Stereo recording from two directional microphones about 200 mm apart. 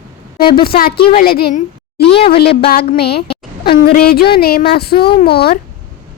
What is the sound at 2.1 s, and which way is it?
Speech, 25° left (ahead or behind).